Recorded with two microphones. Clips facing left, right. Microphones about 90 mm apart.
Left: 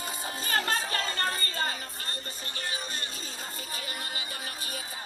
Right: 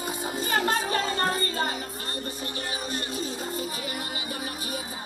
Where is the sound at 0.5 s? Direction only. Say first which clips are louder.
Right 4 dB; 20° right (ahead or behind).